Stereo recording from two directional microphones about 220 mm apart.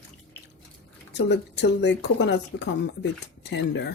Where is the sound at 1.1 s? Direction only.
50° left (ahead or behind).